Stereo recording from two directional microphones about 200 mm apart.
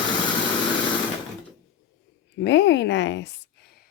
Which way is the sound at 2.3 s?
60° left (ahead or behind).